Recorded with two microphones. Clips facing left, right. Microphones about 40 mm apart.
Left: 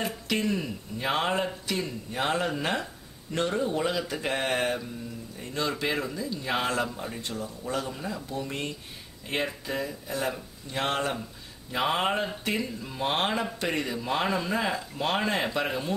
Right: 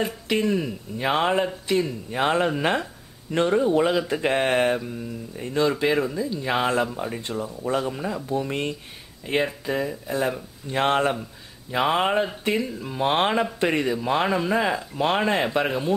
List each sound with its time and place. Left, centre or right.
0.3 s speech: centre
5.7 s speech: centre
9.2 s speech: centre
11.8 s speech: centre